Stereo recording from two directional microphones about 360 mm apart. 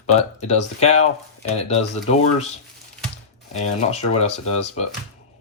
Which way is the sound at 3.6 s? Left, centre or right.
Centre.